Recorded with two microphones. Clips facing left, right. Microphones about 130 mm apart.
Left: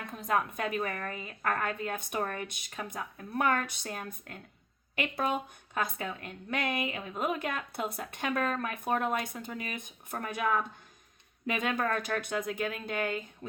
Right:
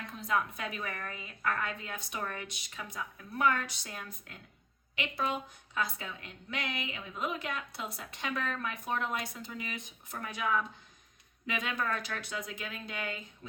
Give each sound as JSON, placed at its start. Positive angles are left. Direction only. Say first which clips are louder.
{"t": 0.0, "sound": "a woman's voice", "louder": "left 2 dB", "side_deg": 50}